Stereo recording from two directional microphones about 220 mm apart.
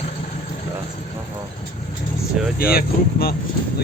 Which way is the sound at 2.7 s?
45° left (ahead or behind).